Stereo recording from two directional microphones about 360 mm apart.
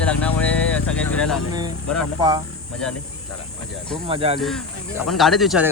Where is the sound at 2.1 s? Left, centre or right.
Centre.